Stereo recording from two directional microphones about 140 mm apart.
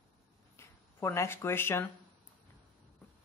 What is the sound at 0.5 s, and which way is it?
Speech, 20° left (ahead or behind).